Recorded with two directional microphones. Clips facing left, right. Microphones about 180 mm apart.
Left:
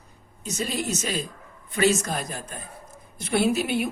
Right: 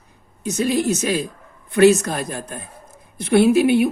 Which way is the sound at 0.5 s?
70° right (ahead or behind).